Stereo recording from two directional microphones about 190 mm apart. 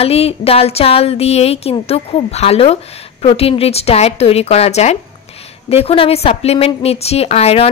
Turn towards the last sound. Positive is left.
turn(degrees=30)  # may be behind; listen again after turning